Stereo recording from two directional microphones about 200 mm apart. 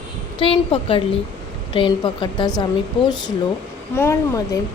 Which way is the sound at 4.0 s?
15° left (ahead or behind).